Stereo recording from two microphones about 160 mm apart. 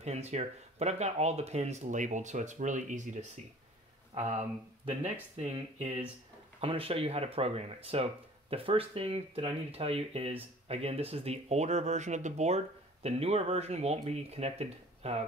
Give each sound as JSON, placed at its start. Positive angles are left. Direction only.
{"t": 0.0, "sound": "speech", "side_deg": -45}